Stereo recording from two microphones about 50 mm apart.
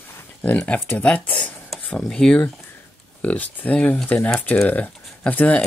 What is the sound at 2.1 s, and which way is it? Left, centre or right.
Speech, centre.